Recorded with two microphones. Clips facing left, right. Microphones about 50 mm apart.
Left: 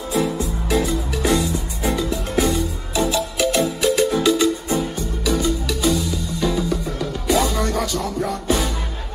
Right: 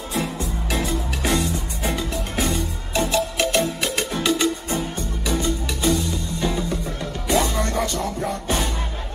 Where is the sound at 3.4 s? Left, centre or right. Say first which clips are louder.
Left 3 dB; right.